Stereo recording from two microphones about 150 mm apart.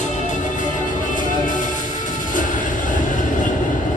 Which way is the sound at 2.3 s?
60° left (ahead or behind).